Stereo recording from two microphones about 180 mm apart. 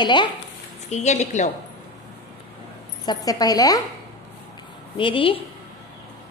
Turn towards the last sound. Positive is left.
turn(degrees=30)  # may be behind; listen again after turning